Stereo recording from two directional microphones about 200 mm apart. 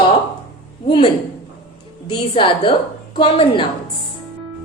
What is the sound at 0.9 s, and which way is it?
A woman's voice, 25° left (ahead or behind).